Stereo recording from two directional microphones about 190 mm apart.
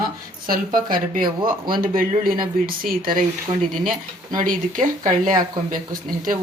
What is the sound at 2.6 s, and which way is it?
Speech, 50° right (ahead or behind).